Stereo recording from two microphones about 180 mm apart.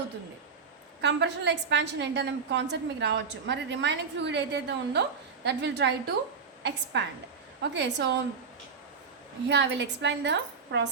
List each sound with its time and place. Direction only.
1.0 s a woman's voice: 75° right (ahead or behind)
9.5 s a woman's voice: 75° right (ahead or behind)